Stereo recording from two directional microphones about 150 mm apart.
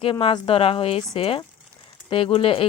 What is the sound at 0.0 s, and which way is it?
Speech, 35° left (ahead or behind).